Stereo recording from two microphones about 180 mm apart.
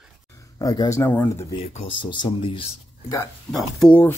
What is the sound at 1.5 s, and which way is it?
Speech, 35° left (ahead or behind).